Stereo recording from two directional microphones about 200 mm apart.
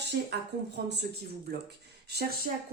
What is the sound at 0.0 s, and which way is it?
Speech, 55° right (ahead or behind).